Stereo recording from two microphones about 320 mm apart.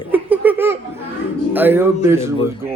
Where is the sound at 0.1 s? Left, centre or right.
Centre.